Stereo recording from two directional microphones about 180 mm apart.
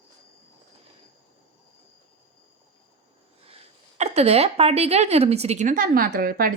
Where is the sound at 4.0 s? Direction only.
35° right (ahead or behind); by 6.5 s 55° right (ahead or behind).